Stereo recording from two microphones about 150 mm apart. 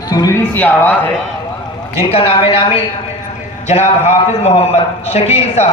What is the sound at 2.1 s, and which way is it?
A man's voice, 40° left (ahead or behind).